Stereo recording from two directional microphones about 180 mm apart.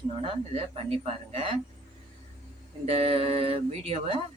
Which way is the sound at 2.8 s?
35° right (ahead or behind).